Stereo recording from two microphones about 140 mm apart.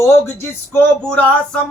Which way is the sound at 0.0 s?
15° left (ahead or behind).